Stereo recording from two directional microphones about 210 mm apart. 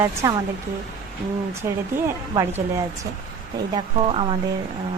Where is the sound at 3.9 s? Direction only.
25° right (ahead or behind).